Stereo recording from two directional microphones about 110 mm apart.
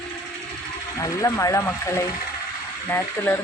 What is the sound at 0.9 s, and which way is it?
Speech, 30° left (ahead or behind).